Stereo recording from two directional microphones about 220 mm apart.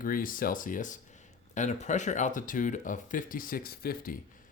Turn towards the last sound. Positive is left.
turn(degrees=40)  # may be behind; listen again after turning